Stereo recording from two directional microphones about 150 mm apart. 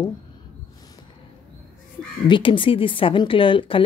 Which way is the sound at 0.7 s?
25° left (ahead or behind).